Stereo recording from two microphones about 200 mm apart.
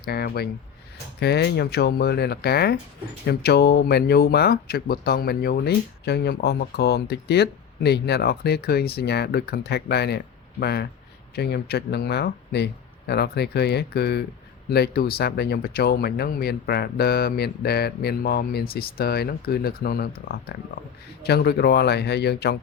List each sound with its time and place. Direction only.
0.0 s speech: 50° left (ahead or behind)